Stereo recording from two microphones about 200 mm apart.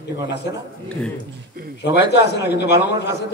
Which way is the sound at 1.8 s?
60° left (ahead or behind).